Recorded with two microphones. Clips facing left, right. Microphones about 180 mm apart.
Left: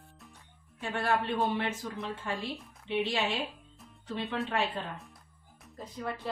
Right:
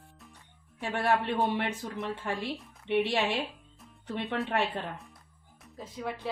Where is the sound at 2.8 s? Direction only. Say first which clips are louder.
Right 4 dB; 65° right (ahead or behind).